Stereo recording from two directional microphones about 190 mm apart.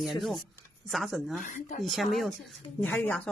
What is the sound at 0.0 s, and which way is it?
Speech, centre (ahead or behind).